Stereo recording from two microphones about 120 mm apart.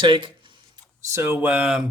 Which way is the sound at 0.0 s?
40° right (ahead or behind).